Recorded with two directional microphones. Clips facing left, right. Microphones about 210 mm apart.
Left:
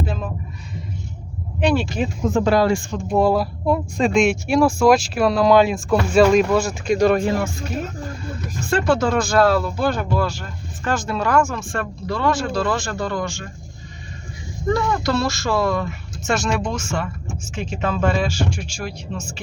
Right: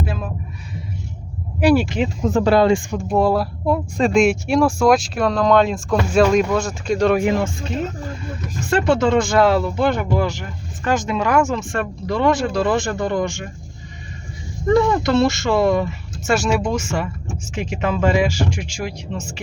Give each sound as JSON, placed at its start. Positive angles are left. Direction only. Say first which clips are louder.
{"t": 0.0, "sound": "a sound", "louder": "even", "side_deg": -5}
{"t": 1.6, "sound": "speech", "louder": "right 4 dB", "side_deg": -10}
{"t": 2.5, "sound": "speech", "louder": "right 5 dB", "side_deg": -25}
{"t": 3.1, "sound": "speech", "louder": "even", "side_deg": 0}
{"t": 7.2, "sound": "speech", "louder": "right 2 dB", "side_deg": -15}
{"t": 8.7, "sound": "speech", "louder": "right 2 dB", "side_deg": -20}
{"t": 14.7, "sound": "speech", "louder": "right 5 dB", "side_deg": -20}
{"t": 16.3, "sound": "speech", "louder": "right 3 dB", "side_deg": -10}